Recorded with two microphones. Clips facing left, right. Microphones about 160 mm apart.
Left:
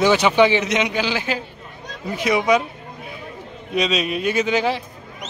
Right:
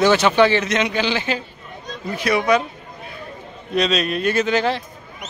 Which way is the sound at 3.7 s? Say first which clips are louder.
Right 1 dB; 10° left (ahead or behind).